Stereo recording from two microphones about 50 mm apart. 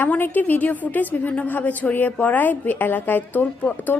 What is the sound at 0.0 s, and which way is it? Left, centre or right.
A woman's voice, left.